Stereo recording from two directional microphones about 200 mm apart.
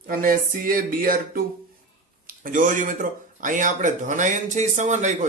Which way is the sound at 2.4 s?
40° right (ahead or behind).